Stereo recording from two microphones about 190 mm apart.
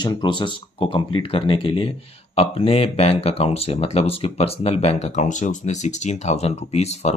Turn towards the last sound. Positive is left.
turn(degrees=35)  # may be behind; listen again after turning